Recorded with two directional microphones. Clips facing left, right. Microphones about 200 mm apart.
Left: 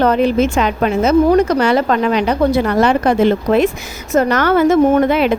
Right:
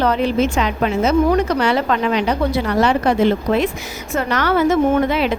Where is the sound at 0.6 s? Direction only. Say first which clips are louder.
Left 3 dB; 50° left (ahead or behind).